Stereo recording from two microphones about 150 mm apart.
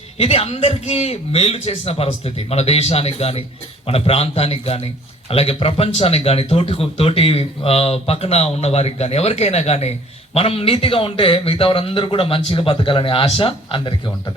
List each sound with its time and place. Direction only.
0.2 s a man's voice: 40° left (ahead or behind)